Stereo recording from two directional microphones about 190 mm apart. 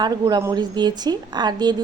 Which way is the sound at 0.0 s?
20° right (ahead or behind).